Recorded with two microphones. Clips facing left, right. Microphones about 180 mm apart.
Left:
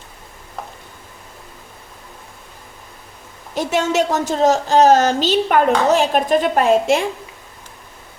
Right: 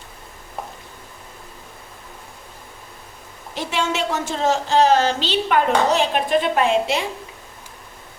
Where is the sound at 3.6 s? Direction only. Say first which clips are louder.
Left 6 dB; 45° left (ahead or behind).